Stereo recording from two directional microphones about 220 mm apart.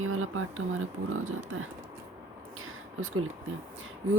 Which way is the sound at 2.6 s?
70° right (ahead or behind).